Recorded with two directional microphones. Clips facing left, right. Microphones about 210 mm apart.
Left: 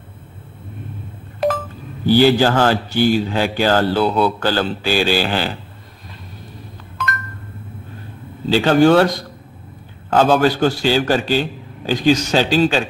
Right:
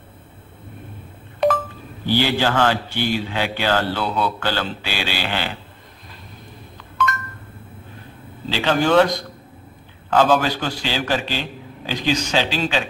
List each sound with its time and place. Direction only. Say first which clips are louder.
1.4 s a sound: even; centre (ahead or behind)
2.1 s a man's voice: left 6 dB; 40° left (ahead or behind)
8.5 s a man's voice: left 7 dB; 45° left (ahead or behind)